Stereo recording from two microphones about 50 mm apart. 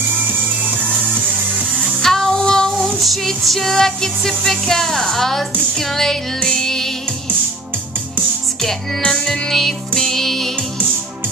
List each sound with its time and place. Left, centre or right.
0.3 s music: right
2.0 s child singing: centre
5.8 s music: centre
8.5 s music: centre